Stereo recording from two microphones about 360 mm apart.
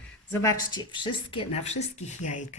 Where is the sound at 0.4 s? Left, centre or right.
Centre.